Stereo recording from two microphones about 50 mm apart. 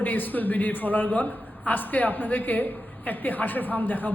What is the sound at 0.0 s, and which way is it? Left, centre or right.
A man's voice, left.